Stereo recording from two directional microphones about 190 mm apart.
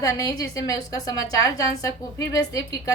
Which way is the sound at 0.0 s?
20° left (ahead or behind).